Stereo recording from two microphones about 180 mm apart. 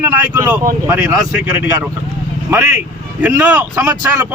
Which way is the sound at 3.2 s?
10° right (ahead or behind).